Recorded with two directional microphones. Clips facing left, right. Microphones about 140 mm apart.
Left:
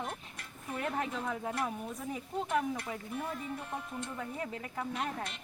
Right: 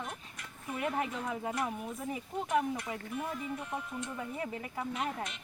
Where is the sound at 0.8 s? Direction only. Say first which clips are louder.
Right 1 dB; 10° right (ahead or behind).